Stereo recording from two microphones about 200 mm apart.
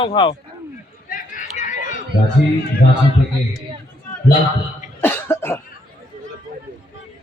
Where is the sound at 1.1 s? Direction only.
40° left (ahead or behind).